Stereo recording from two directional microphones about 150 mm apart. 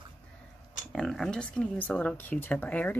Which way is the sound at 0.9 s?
5° left (ahead or behind).